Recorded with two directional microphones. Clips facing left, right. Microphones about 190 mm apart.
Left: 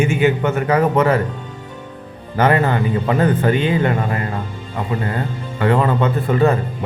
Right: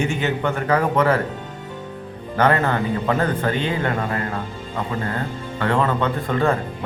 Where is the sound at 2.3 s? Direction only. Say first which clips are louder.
Left 3 dB; 15° left (ahead or behind).